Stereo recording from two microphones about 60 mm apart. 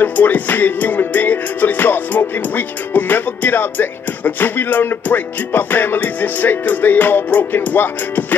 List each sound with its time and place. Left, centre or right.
0.0 s music: left